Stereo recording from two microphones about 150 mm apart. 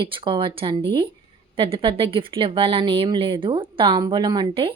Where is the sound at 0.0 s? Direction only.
35° right (ahead or behind).